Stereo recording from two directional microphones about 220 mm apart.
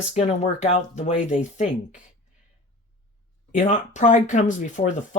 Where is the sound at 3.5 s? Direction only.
35° left (ahead or behind).